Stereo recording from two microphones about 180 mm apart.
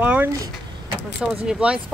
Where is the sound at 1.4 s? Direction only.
5° right (ahead or behind).